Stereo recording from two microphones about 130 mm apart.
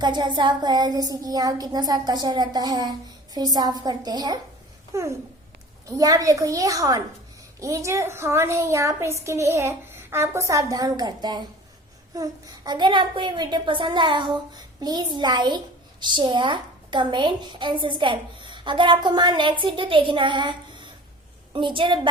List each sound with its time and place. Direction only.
0.0 s a child's voice: 35° right (ahead or behind)